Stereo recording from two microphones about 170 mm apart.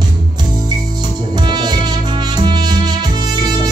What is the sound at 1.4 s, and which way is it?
Music, 25° right (ahead or behind).